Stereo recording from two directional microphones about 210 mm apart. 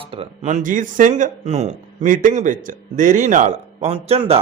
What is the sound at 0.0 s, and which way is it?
A man's voice, 30° right (ahead or behind).